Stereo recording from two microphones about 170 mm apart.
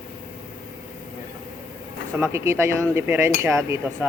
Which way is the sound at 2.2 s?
15° right (ahead or behind).